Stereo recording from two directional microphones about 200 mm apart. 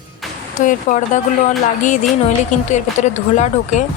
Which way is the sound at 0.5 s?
40° left (ahead or behind).